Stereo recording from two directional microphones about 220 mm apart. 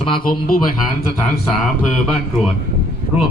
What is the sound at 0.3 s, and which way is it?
Speech, 40° left (ahead or behind).